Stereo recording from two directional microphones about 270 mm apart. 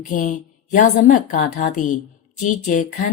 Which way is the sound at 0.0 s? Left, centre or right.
Left.